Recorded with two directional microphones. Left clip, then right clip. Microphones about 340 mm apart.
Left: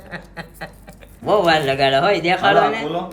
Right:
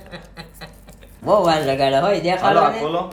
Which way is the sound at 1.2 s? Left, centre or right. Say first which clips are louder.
Even; centre.